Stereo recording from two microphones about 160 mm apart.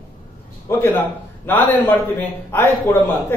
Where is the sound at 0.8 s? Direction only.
15° left (ahead or behind).